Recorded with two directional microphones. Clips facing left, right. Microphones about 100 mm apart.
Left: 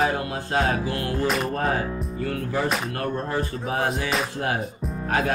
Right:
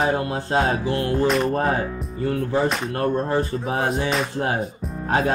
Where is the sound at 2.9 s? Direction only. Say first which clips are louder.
Right 5 dB; 30° right (ahead or behind).